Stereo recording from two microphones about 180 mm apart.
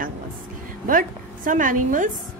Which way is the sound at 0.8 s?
50° right (ahead or behind).